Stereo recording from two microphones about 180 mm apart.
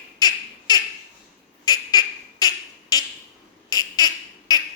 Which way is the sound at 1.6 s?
20° left (ahead or behind).